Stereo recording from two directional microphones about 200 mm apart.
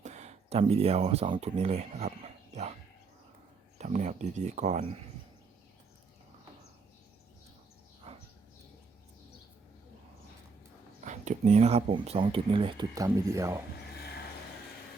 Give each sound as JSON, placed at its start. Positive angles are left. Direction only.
{"t": 0.0, "sound": "speech", "side_deg": -35}
{"t": 2.5, "sound": "dog", "side_deg": -35}
{"t": 3.8, "sound": "speech", "side_deg": -35}
{"t": 8.1, "sound": "a sound", "side_deg": -30}
{"t": 11.0, "sound": "speech", "side_deg": -35}